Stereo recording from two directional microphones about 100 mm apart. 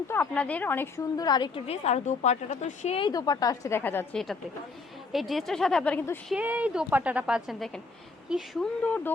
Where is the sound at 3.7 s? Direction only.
20° left (ahead or behind).